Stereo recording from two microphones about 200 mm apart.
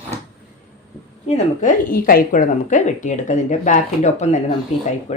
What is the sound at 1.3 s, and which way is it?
A woman's voice, 35° left (ahead or behind).